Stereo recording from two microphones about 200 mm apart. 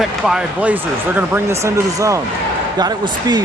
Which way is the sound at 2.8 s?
20° right (ahead or behind).